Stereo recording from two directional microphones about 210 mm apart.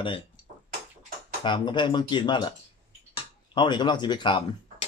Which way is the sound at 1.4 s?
20° left (ahead or behind).